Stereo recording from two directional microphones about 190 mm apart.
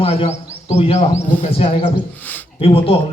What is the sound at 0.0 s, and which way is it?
A man's voice, 30° left (ahead or behind).